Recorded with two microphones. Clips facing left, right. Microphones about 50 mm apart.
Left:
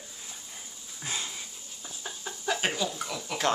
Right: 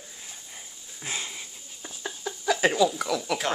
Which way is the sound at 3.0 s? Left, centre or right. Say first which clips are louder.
Right 8 dB; right.